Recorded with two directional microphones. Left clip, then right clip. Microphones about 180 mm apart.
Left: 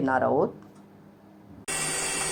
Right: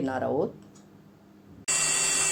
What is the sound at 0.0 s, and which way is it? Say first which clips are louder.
Speech: left 4 dB; 10° left (ahead or behind).